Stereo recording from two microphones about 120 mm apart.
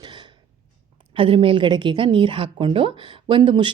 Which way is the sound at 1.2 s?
45° right (ahead or behind).